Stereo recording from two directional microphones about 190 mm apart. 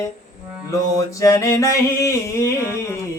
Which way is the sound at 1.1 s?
15° left (ahead or behind).